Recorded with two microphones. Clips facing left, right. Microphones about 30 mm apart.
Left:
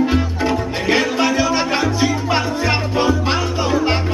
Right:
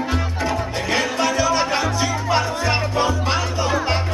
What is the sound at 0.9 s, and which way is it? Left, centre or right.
Music, centre.